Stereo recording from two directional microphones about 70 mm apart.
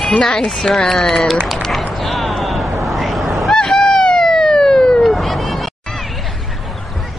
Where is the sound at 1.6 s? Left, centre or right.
Centre.